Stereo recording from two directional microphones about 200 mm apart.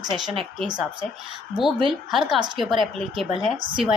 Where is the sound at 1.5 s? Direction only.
Centre (ahead or behind).